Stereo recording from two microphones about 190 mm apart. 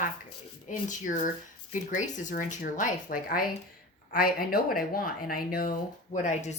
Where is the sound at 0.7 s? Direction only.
40° left (ahead or behind).